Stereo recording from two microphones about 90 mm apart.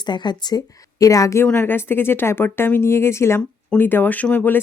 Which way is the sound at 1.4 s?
20° left (ahead or behind).